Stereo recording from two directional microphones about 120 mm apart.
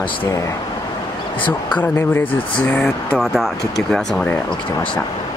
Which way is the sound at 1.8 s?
15° left (ahead or behind).